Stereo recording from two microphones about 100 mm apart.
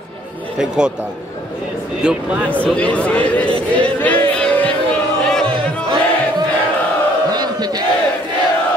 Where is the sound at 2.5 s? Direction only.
10° left (ahead or behind).